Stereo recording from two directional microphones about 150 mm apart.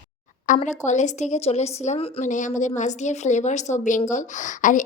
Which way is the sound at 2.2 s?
55° left (ahead or behind).